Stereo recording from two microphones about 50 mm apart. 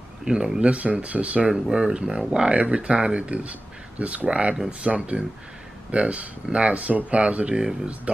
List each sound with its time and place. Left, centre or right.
0.2 s speech: centre
1.5 s speech: centre